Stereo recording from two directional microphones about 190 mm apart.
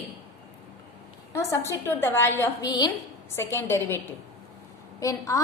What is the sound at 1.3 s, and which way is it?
A woman's voice, 15° left (ahead or behind).